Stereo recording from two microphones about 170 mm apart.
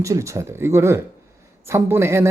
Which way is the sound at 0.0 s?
20° right (ahead or behind).